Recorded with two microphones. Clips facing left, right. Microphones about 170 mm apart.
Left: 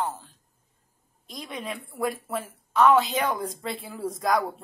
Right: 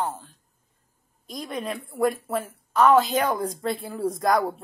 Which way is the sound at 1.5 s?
Centre (ahead or behind).